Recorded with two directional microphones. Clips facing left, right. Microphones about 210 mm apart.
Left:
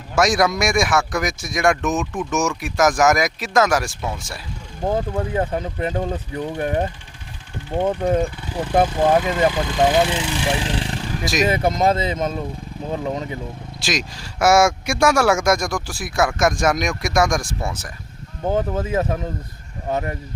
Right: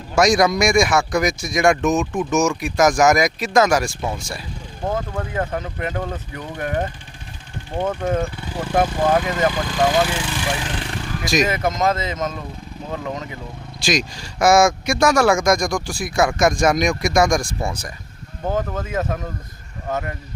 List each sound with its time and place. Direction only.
0.2 s speech: centre (ahead or behind)
5.1 s speech: 25° left (ahead or behind)
13.8 s speech: centre (ahead or behind)
18.4 s speech: 20° left (ahead or behind)